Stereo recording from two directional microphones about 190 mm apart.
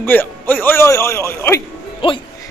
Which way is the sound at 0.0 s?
10° left (ahead or behind).